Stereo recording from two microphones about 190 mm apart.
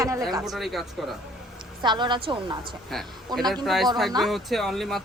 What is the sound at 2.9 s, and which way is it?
Speech, centre (ahead or behind).